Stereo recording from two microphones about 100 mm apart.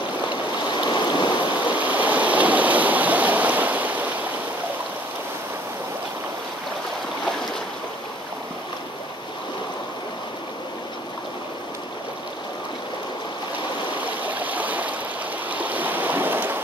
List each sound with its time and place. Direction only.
0.7 s rain: 45° left (ahead or behind)
1.7 s stream: 15° right (ahead or behind)
14.2 s stream: 15° right (ahead or behind)